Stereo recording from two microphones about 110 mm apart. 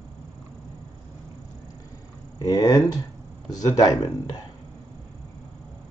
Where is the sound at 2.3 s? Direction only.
35° left (ahead or behind).